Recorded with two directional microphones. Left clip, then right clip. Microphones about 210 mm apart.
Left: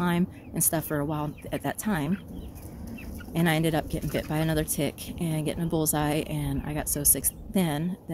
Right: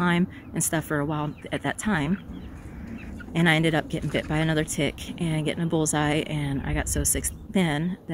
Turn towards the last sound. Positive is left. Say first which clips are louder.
# right 3 dB
turn(degrees=-5)  # may be behind; listen again after turning